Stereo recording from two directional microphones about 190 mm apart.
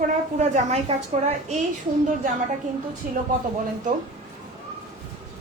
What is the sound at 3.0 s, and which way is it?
Speech, 45° right (ahead or behind).